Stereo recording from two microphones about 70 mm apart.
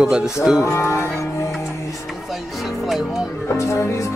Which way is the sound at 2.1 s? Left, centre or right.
Centre.